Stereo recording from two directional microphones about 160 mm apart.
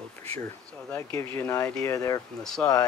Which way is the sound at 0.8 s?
15° left (ahead or behind).